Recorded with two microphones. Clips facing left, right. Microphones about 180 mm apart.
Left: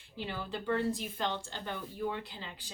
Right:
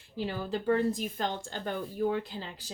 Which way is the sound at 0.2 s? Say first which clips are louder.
Right 6 dB; 40° right (ahead or behind).